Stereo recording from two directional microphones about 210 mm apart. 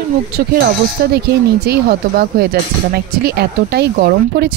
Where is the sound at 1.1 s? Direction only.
50° right (ahead or behind).